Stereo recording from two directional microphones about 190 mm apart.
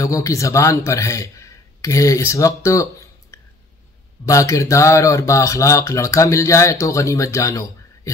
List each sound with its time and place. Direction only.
0.0 s speech: 15° left (ahead or behind)